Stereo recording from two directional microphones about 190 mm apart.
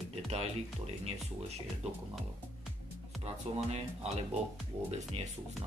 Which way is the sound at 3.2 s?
35° right (ahead or behind).